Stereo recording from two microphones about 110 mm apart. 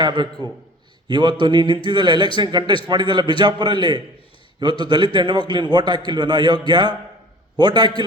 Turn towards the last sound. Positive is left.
turn(degrees=-40)  # may be behind; listen again after turning